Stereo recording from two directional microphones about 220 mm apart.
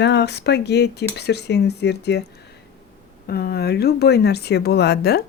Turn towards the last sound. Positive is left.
turn(degrees=45)  # may be behind; listen again after turning